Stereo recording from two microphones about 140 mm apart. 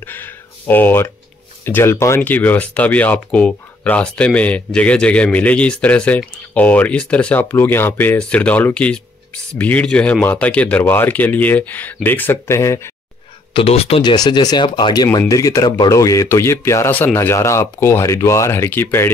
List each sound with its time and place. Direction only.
0.1 s a sound: 15° left (ahead or behind)
1.6 s speech: 15° left (ahead or behind)
13.5 s speech: 40° left (ahead or behind)
14.1 s speech: 30° left (ahead or behind)